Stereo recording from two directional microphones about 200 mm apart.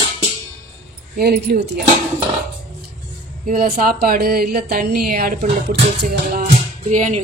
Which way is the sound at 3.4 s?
45° right (ahead or behind).